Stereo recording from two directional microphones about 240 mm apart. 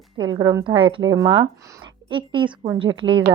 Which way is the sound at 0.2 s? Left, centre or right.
Centre.